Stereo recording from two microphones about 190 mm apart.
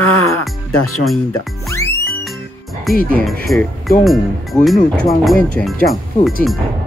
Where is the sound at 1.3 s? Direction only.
15° left (ahead or behind).